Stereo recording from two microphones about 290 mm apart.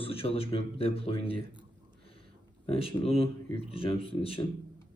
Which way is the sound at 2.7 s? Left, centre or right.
Centre.